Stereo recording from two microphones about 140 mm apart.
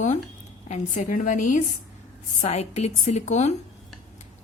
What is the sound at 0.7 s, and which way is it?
Speech, 65° left (ahead or behind).